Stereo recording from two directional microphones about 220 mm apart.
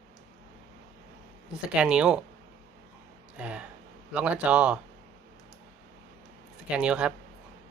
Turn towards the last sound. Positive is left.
turn(degrees=-5)  # may be behind; listen again after turning